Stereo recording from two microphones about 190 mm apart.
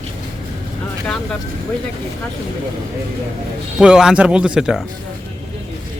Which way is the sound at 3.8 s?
5° right (ahead or behind).